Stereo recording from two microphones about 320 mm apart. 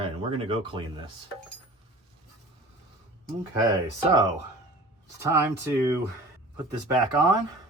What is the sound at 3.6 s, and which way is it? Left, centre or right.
Speech, centre.